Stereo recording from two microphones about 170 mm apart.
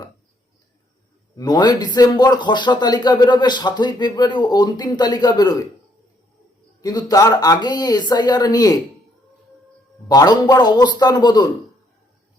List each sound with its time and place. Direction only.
1.4 s speech: 25° left (ahead or behind)
6.8 s speech: 20° left (ahead or behind)
10.1 s speech: 20° left (ahead or behind)